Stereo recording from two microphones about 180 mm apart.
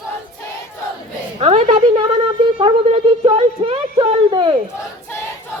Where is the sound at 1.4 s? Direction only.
35° right (ahead or behind).